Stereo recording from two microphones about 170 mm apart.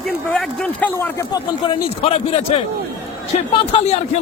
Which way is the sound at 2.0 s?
35° left (ahead or behind).